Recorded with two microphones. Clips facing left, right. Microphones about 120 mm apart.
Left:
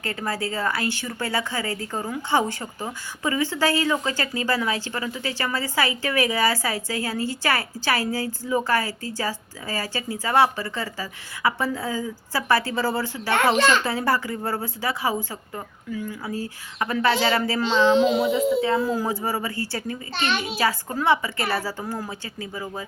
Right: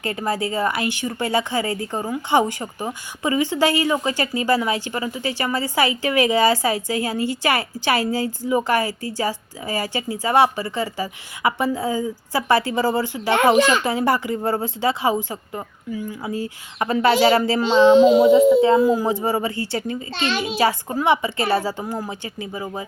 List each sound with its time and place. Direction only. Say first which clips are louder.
0.0 s a woman's voice: right 4 dB; 20° right (ahead or behind)